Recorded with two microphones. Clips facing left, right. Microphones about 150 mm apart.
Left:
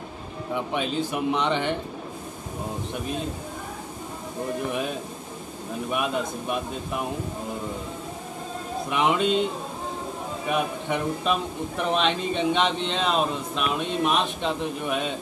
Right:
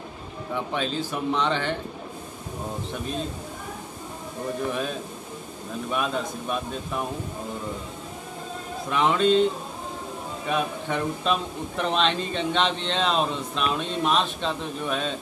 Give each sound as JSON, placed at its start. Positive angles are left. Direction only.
{"t": 0.7, "sound": "speech", "side_deg": 15}
{"t": 5.9, "sound": "speech", "side_deg": 15}
{"t": 8.9, "sound": "speech", "side_deg": 15}
{"t": 10.5, "sound": "speech", "side_deg": 10}